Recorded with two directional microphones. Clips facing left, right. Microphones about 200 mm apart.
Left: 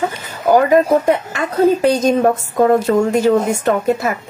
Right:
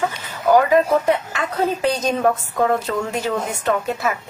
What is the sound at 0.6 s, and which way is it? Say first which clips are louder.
Speech: left 4 dB; 45° left (ahead or behind).